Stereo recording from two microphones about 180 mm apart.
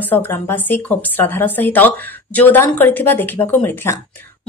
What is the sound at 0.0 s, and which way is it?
A woman's voice, 10° left (ahead or behind).